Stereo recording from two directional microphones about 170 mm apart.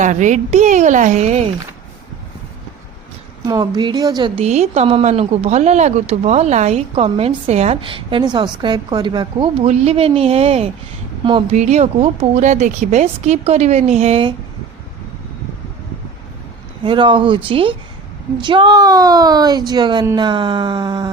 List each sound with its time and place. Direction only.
0.0 s a woman's voice: 45° right (ahead or behind)
3.4 s a woman's voice: 25° right (ahead or behind)
4.4 s speech: 40° right (ahead or behind)
16.8 s a woman's voice: 30° right (ahead or behind)